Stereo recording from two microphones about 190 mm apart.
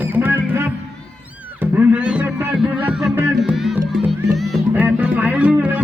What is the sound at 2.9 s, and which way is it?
Music, 5° right (ahead or behind).